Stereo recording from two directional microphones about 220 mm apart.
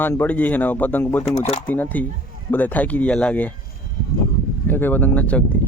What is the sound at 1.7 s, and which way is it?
Speech, 5° left (ahead or behind).